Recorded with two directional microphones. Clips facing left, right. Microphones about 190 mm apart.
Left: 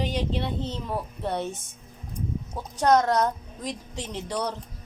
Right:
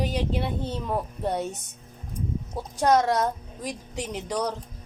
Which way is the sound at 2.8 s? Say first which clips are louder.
Left 1 dB; 10° right (ahead or behind).